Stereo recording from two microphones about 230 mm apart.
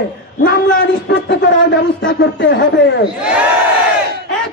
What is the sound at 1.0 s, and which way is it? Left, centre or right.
A man's voice, left.